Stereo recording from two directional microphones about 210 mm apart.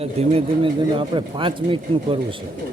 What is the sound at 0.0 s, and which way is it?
Speech, 30° right (ahead or behind).